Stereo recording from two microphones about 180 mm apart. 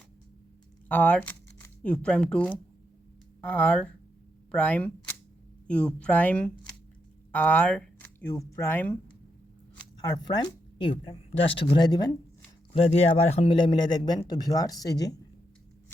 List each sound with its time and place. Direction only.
0.9 s speech: 10° left (ahead or behind)
10.0 s speech: 20° left (ahead or behind)
12.7 s speech: 35° left (ahead or behind)